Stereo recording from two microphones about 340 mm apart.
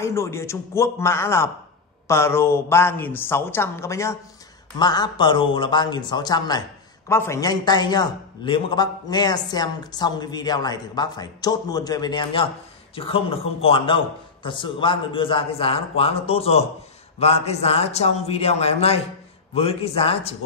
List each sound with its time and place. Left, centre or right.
0.0 s a man's voice: centre